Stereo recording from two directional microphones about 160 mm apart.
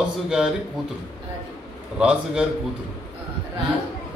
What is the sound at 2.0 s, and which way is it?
Speech, 5° right (ahead or behind).